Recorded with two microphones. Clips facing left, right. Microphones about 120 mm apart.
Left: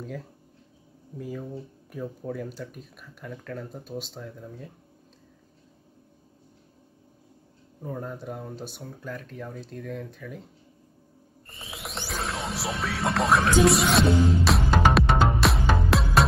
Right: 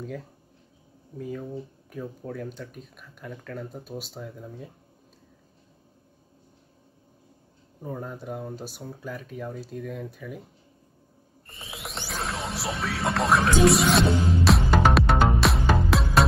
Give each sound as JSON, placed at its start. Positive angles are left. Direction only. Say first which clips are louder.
{"t": 0.0, "sound": "speech", "louder": "right 1 dB", "side_deg": 0}
{"t": 7.8, "sound": "speech", "louder": "even", "side_deg": 0}
{"t": 11.7, "sound": "music", "louder": "left 1 dB", "side_deg": 0}